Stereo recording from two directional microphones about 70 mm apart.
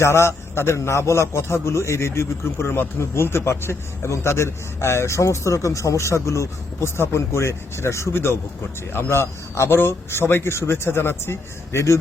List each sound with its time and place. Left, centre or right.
0.0 s a man's voice: left